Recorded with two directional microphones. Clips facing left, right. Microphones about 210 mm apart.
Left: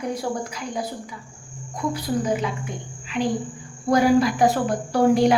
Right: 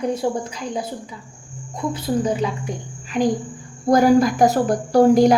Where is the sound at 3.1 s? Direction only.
40° right (ahead or behind).